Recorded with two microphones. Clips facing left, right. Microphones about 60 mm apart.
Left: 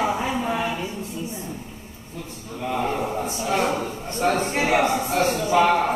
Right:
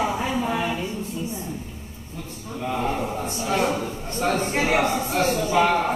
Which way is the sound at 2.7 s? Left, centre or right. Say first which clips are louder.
Left 1 dB; centre.